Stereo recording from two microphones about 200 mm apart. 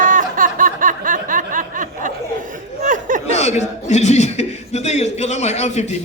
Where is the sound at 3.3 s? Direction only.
35° left (ahead or behind).